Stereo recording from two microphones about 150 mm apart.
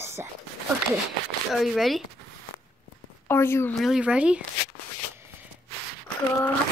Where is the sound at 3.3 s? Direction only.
15° left (ahead or behind).